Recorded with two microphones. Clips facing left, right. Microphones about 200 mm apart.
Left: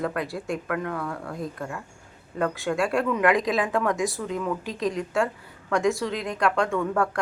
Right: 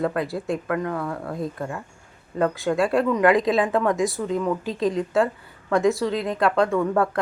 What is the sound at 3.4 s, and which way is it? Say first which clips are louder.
Speech: right 4 dB; 30° right (ahead or behind).